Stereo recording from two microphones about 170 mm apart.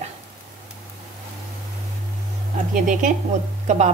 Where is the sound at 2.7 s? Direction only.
50° right (ahead or behind).